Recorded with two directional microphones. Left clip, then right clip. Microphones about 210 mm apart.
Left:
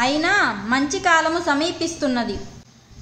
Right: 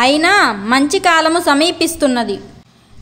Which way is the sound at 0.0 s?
40° right (ahead or behind).